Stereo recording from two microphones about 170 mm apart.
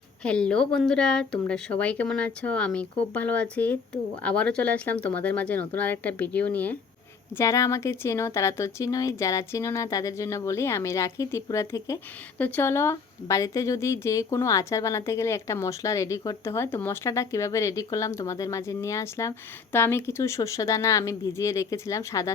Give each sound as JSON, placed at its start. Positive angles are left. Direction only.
{"t": 0.2, "sound": "speech", "side_deg": 5}